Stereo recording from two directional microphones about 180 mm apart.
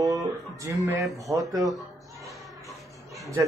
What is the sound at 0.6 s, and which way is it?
Speech, 15° right (ahead or behind).